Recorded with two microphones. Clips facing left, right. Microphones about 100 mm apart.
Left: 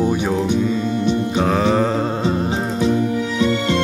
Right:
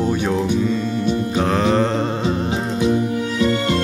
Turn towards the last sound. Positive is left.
turn(degrees=-40)  # may be behind; listen again after turning